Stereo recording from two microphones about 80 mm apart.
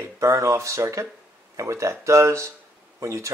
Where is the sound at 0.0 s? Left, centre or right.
Right.